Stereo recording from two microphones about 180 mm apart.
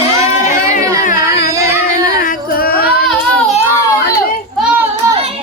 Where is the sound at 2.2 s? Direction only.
55° left (ahead or behind).